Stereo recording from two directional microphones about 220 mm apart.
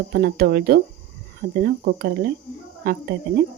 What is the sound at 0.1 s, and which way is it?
A woman's voice, 45° right (ahead or behind).